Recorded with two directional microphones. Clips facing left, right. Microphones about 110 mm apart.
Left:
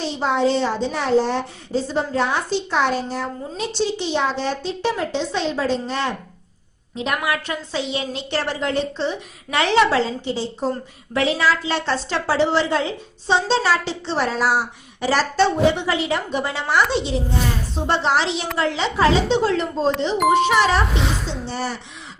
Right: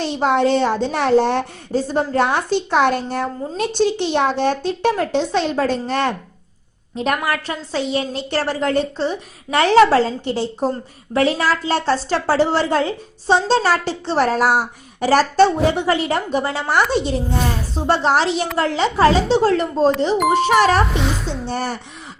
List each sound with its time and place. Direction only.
0.0 s a woman's voice: 60° right (ahead or behind)
11.1 s a woman's voice: 45° right (ahead or behind)
20.1 s a child's voice: centre (ahead or behind)
20.5 s a woman's voice: 45° right (ahead or behind)
21.0 s a woman's voice: centre (ahead or behind)
21.4 s a woman's voice: 50° right (ahead or behind)